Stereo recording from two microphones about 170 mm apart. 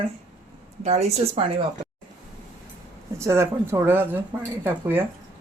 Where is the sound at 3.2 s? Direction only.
15° right (ahead or behind).